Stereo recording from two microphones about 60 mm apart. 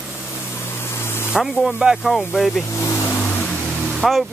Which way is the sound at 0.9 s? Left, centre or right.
Left.